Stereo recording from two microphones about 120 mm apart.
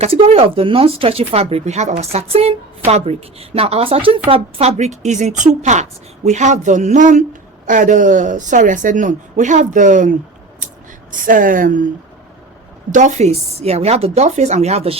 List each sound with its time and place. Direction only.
0.0 s a woman's voice: 55° right (ahead or behind); by 10.1 s 90° right
11.1 s a woman's voice: 90° right
12.9 s speech: 85° right; by 14.9 s 60° right (ahead or behind)